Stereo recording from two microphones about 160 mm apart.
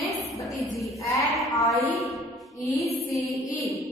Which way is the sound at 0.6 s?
Centre (ahead or behind).